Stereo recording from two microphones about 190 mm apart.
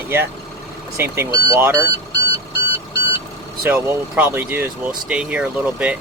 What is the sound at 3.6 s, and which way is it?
Speech, 10° right (ahead or behind).